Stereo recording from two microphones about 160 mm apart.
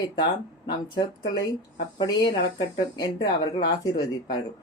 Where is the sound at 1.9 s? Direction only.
25° left (ahead or behind).